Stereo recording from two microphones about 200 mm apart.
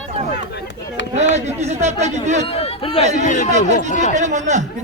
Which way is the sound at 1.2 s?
35° right (ahead or behind).